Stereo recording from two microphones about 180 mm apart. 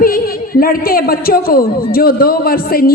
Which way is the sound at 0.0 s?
55° left (ahead or behind).